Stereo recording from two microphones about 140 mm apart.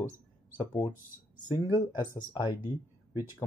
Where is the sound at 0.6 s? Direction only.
30° left (ahead or behind).